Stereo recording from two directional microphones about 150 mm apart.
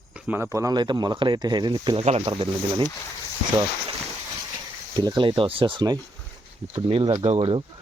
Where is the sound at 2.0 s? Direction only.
45° right (ahead or behind).